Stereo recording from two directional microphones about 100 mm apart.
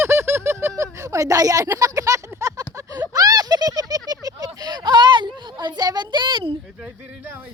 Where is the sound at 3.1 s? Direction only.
40° right (ahead or behind).